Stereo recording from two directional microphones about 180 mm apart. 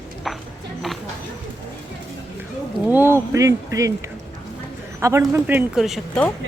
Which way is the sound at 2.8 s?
10° right (ahead or behind).